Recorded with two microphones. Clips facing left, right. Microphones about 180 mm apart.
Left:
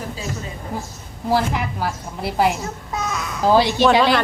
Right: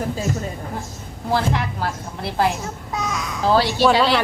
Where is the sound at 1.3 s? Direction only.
5° left (ahead or behind).